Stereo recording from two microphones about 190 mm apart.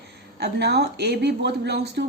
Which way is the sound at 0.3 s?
60° right (ahead or behind).